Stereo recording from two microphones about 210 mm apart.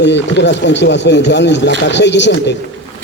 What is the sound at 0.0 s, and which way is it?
Speech, 55° left (ahead or behind).